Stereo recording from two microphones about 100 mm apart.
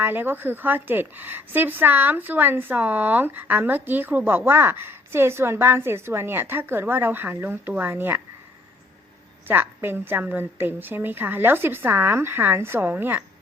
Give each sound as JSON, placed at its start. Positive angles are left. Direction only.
{"t": 0.0, "sound": "a woman's voice", "side_deg": -20}
{"t": 9.5, "sound": "a woman's voice", "side_deg": -20}